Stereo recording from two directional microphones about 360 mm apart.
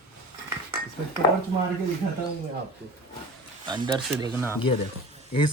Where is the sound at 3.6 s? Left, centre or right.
Centre.